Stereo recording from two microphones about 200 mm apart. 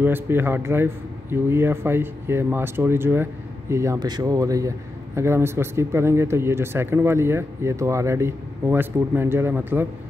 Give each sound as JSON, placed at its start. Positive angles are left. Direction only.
{"t": 0.0, "sound": "a man's voice", "side_deg": -10}